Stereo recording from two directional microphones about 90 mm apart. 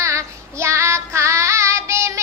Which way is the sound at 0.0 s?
35° right (ahead or behind).